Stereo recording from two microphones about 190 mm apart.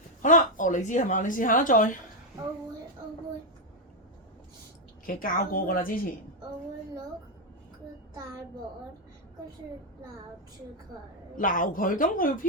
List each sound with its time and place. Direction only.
0.2 s speech: 45° left (ahead or behind)
5.0 s speech: 45° left (ahead or behind)
11.3 s speech: 45° left (ahead or behind)